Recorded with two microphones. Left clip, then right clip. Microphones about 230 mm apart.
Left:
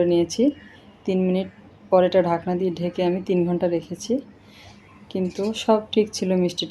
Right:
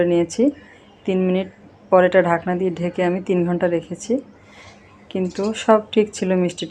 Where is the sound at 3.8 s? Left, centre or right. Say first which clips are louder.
Right 3 dB; right.